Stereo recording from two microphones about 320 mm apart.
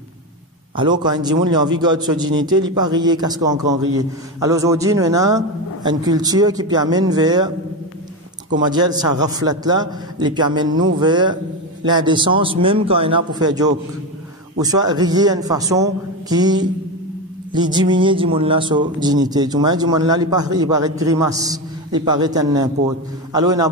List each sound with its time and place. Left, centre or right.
0.7 s a man's voice: centre
8.5 s a man's voice: centre